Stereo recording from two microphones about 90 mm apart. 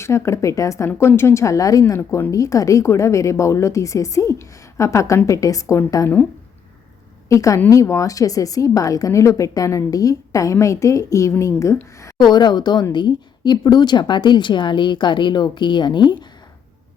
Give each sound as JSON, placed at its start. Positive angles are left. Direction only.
{"t": 0.0, "sound": "a woman's voice", "side_deg": 30}
{"t": 2.0, "sound": "speech", "side_deg": 25}
{"t": 2.3, "sound": "a woman's voice", "side_deg": 40}
{"t": 7.3, "sound": "a woman's voice", "side_deg": 35}
{"t": 12.2, "sound": "speech", "side_deg": 50}